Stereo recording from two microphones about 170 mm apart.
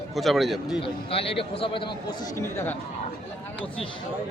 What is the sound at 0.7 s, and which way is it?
A man's voice, 35° left (ahead or behind).